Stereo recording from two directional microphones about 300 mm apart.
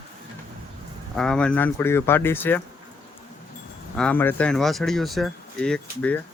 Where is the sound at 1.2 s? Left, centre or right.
Centre.